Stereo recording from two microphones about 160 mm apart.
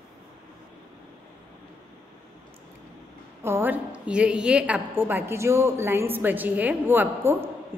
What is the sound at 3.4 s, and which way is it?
A woman's voice, 15° right (ahead or behind).